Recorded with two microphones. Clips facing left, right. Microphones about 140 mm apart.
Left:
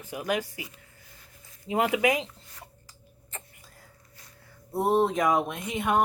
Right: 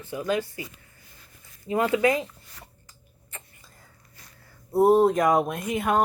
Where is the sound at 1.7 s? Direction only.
15° left (ahead or behind).